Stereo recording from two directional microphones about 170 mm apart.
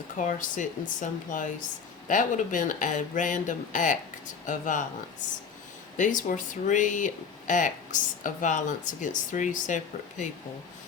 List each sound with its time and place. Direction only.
0.2 s speech: 50° left (ahead or behind)
6.0 s speech: 50° left (ahead or behind)